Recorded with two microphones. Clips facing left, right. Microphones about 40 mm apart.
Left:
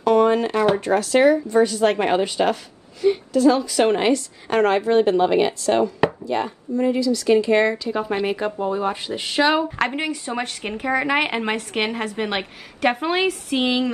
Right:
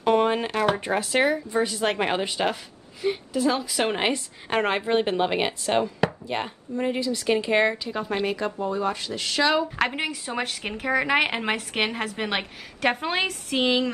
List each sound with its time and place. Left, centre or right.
0.0 s a sound: centre
0.7 s speech: centre
3.8 s a woman's voice: centre
8.3 s speech: centre
9.8 s speech: centre